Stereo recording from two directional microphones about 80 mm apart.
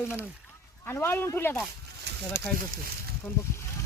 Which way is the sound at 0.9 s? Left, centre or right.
Left.